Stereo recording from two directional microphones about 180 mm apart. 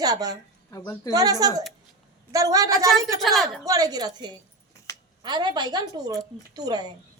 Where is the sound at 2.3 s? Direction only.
20° right (ahead or behind).